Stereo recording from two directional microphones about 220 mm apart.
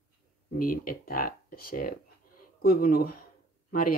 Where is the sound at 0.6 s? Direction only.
40° left (ahead or behind).